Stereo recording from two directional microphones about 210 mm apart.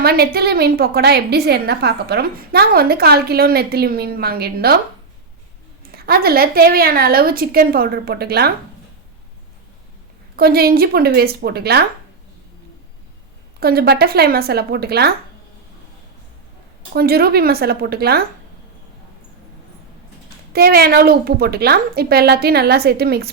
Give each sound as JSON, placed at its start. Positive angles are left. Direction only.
{"t": 0.0, "sound": "a woman's voice", "side_deg": -45}
{"t": 5.9, "sound": "a woman's voice", "side_deg": -45}
{"t": 10.3, "sound": "a woman's voice", "side_deg": -45}
{"t": 13.6, "sound": "a woman's voice", "side_deg": -45}
{"t": 16.9, "sound": "a woman's voice", "side_deg": -45}
{"t": 20.5, "sound": "a woman's voice", "side_deg": -45}